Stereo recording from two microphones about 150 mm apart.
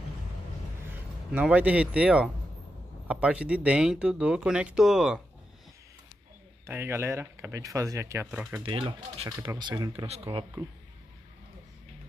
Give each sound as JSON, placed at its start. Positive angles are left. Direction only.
{"t": 1.3, "sound": "speech", "side_deg": -10}
{"t": 6.6, "sound": "speech", "side_deg": -15}
{"t": 8.6, "sound": "speech", "side_deg": -35}
{"t": 10.6, "sound": "speech", "side_deg": -25}